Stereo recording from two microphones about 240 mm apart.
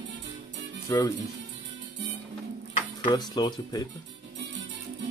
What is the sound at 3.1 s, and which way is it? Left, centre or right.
Speech, centre.